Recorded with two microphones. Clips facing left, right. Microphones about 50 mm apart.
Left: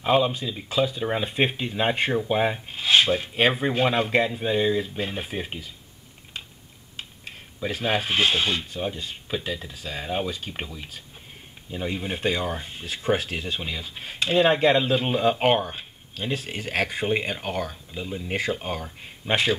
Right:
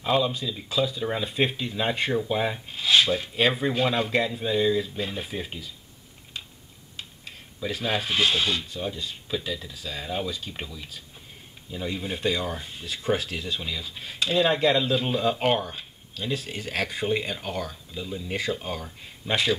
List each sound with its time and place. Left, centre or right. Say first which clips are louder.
0.0 s speech: left 3 dB; left
7.0 s speech: left 2 dB; left